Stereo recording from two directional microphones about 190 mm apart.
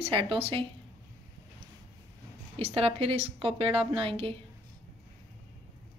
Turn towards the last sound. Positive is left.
turn(degrees=-30)  # may be behind; listen again after turning